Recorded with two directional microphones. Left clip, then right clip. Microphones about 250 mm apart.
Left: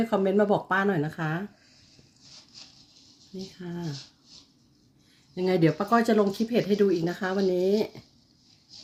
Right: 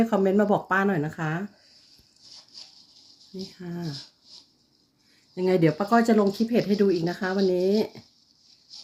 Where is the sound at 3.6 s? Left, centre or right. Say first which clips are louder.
Left 1 dB; centre.